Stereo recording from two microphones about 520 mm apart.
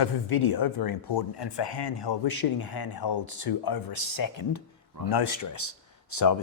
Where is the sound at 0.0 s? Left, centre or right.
Left.